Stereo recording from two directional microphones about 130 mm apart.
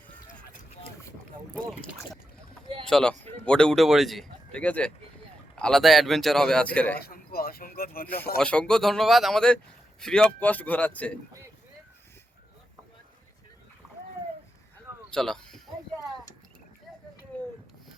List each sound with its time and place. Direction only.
2.8 s a man's voice: 5° left (ahead or behind)
7.6 s speech: 90° left
8.0 s speech: 10° left (ahead or behind)
13.8 s splash: 5° right (ahead or behind)
15.1 s speech: 5° left (ahead or behind)